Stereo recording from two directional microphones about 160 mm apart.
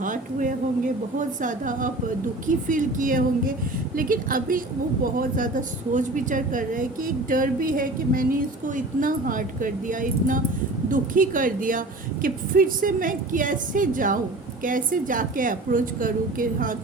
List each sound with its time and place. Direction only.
0.0 s a woman's voice: 55° right (ahead or behind)